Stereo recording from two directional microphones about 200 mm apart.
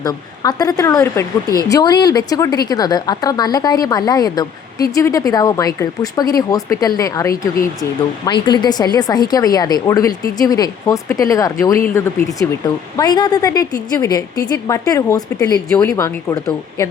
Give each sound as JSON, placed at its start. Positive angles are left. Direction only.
{"t": 0.0, "sound": "a woman's voice", "side_deg": 20}